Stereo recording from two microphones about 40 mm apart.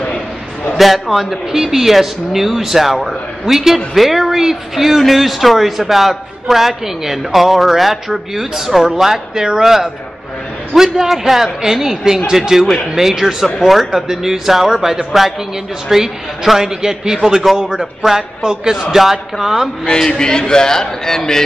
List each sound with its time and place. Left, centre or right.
0.7 s speech: centre
20.0 s a man's voice: centre